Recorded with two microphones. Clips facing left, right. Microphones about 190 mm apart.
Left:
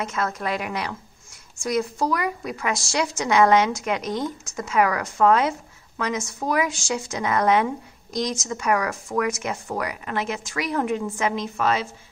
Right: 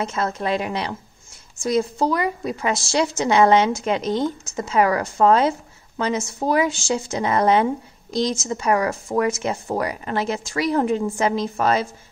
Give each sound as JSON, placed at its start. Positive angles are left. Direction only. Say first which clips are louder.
{"t": 0.0, "sound": "a woman's voice", "louder": "right 3 dB", "side_deg": -30}